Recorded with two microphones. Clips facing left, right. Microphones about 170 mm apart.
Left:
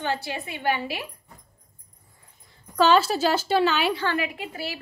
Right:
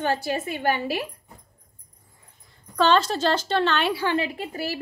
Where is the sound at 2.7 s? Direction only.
5° left (ahead or behind).